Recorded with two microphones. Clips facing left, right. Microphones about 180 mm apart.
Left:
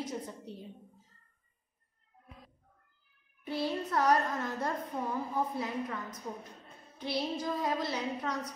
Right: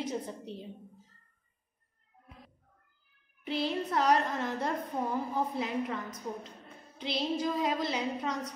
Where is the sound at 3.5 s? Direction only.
20° right (ahead or behind).